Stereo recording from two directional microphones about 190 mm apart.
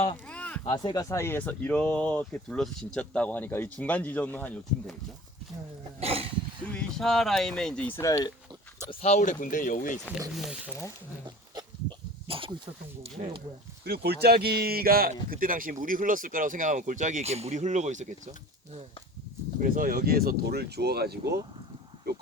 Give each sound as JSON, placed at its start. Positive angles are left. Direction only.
{"t": 0.3, "sound": "a sound", "side_deg": 5}
{"t": 0.6, "sound": "speech", "side_deg": 25}
{"t": 6.0, "sound": "speech", "side_deg": -30}
{"t": 6.7, "sound": "speech", "side_deg": 5}
{"t": 8.9, "sound": "speech", "side_deg": 35}
{"t": 10.2, "sound": "speech", "side_deg": -5}
{"t": 11.5, "sound": "a sound", "side_deg": -25}
{"t": 13.8, "sound": "speech", "side_deg": -55}
{"t": 19.6, "sound": "speech", "side_deg": -45}